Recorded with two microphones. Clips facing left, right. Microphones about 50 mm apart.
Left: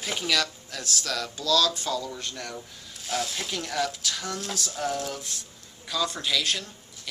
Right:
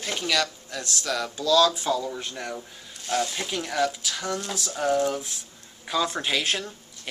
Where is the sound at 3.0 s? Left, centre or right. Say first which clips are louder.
Right 4 dB; centre.